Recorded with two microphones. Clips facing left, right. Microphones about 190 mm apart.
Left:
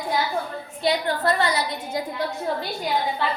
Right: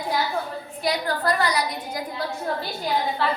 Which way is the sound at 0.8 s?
25° left (ahead or behind).